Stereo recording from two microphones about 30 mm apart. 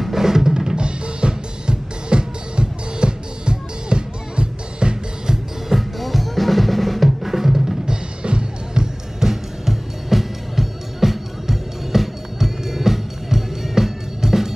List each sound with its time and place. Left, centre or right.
0.0 s drum: centre
0.7 s music: right
5.3 s music: centre
5.9 s drum: centre
7.2 s music: centre
7.8 s music: right
9.2 s music: centre